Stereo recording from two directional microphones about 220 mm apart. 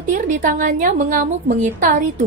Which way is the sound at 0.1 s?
35° right (ahead or behind).